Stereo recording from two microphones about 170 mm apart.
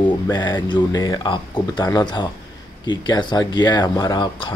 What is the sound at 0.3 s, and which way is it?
Speech, 25° left (ahead or behind).